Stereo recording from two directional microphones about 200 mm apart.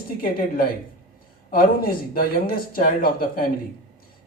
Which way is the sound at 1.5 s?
45° left (ahead or behind).